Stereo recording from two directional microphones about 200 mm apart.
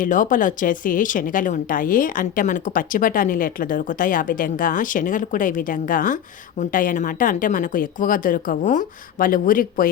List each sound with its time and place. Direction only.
0.0 s a woman's voice: 40° left (ahead or behind)